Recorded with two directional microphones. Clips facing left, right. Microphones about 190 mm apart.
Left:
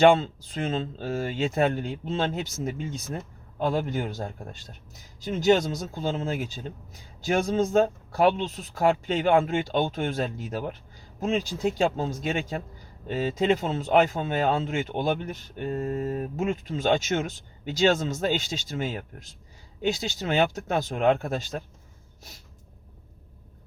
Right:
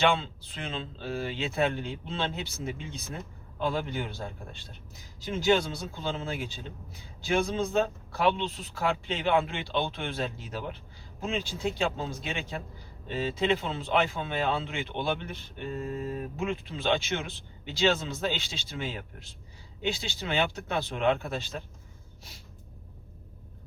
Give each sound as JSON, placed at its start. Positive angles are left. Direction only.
{"t": 0.0, "sound": "speech", "side_deg": 45}